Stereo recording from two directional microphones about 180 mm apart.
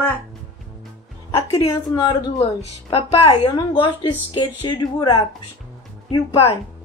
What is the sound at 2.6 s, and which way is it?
A woman's voice, 35° left (ahead or behind).